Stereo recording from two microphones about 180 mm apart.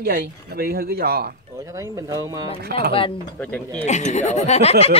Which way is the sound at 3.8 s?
40° left (ahead or behind).